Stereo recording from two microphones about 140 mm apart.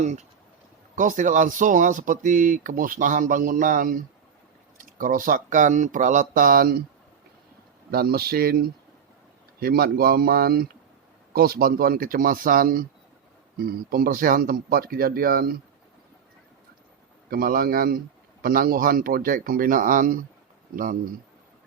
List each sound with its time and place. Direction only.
0.0 s speech: 55° right (ahead or behind)
0.9 s speech: 65° right (ahead or behind); by 6.7 s 90° right
7.9 s speech: 90° right
17.2 s speech: 90° right